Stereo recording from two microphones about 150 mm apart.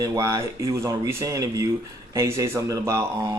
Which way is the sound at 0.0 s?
20° right (ahead or behind).